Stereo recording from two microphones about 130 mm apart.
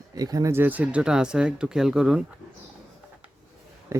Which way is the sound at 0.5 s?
15° right (ahead or behind).